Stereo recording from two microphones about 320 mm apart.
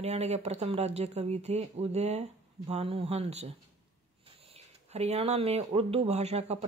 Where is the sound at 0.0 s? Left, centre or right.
Centre.